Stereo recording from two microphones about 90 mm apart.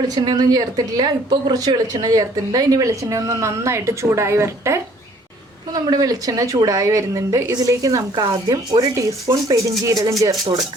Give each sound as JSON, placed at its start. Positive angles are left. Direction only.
{"t": 0.1, "sound": "a woman's voice", "side_deg": -50}
{"t": 5.7, "sound": "a woman's voice", "side_deg": -45}